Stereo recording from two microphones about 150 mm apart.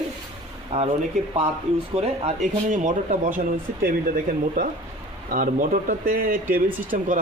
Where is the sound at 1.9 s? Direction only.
45° right (ahead or behind).